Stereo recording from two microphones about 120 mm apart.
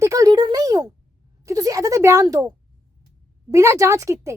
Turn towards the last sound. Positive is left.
turn(degrees=-25)  # may be behind; listen again after turning